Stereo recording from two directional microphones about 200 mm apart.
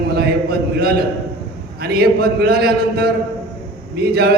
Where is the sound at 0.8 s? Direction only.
50° right (ahead or behind).